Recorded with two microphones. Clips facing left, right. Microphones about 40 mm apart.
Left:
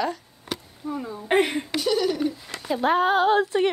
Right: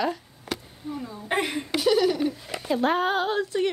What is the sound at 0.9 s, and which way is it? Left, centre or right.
Speech, centre.